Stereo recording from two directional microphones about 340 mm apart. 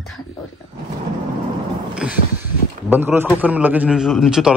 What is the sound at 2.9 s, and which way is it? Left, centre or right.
A man's voice, centre.